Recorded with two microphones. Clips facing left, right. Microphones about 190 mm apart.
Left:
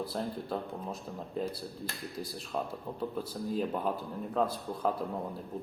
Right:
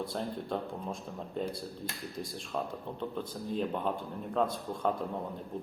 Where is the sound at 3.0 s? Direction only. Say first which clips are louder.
Left 3 dB; 5° left (ahead or behind).